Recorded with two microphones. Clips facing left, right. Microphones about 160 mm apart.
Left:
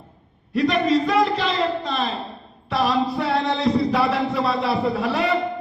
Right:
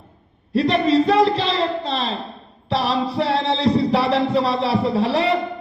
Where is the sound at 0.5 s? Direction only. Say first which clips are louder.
Right 2 dB; 30° right (ahead or behind).